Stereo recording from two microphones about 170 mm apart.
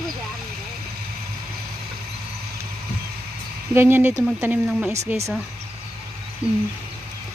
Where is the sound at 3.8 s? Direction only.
15° right (ahead or behind).